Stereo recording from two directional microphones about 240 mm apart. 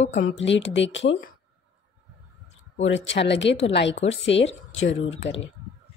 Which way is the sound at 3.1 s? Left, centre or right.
Left.